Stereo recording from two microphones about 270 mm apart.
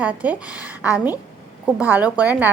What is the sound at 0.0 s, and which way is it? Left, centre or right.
A woman's voice, centre.